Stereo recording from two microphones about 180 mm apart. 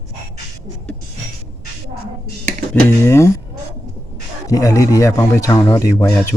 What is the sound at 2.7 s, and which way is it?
Speech, 15° left (ahead or behind).